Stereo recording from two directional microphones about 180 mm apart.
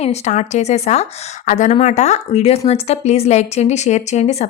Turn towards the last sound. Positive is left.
turn(degrees=35)  # may be behind; listen again after turning